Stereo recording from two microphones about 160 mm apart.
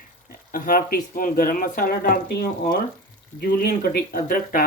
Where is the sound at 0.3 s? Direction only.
65° left (ahead or behind).